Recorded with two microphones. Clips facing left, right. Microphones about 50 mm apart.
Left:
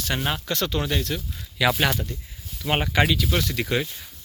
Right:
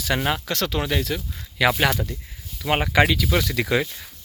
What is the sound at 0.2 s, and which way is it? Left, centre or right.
Speech, right.